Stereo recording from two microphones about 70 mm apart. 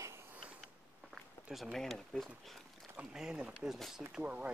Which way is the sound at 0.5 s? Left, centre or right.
Centre.